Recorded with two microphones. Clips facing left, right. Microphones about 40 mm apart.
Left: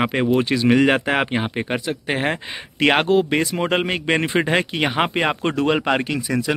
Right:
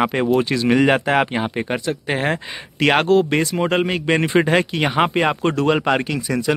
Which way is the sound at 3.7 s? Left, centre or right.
Left.